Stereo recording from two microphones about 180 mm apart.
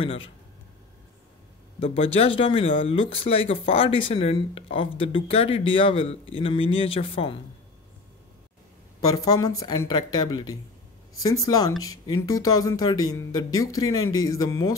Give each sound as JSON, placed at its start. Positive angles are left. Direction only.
{"t": 0.0, "sound": "speech", "side_deg": 30}
{"t": 1.8, "sound": "speech", "side_deg": 35}
{"t": 9.1, "sound": "speech", "side_deg": 20}